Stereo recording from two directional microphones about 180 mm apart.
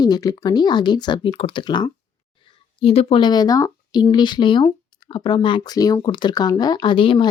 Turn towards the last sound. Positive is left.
turn(degrees=30)  # may be behind; listen again after turning